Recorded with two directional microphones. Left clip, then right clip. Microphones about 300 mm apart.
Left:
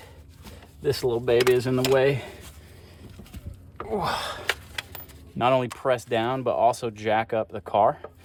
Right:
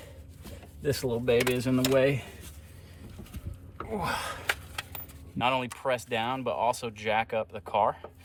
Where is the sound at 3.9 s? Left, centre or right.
Left.